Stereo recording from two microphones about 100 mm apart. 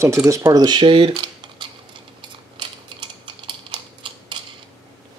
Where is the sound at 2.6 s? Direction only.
55° right (ahead or behind).